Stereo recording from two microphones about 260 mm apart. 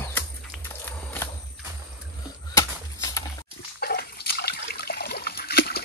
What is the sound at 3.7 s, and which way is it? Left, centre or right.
Water, left.